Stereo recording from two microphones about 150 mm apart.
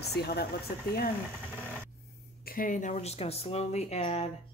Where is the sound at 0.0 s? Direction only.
90° left.